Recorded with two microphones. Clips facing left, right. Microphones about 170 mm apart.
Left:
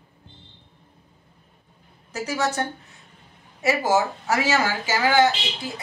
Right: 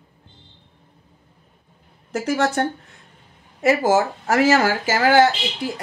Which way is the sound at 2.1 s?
55° right (ahead or behind).